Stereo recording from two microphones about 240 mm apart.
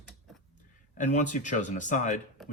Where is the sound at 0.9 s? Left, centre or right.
Left.